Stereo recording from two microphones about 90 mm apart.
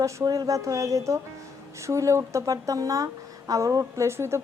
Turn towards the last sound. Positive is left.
turn(degrees=-30)  # may be behind; listen again after turning